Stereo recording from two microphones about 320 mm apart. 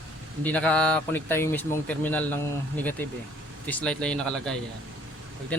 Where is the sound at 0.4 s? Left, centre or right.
Centre.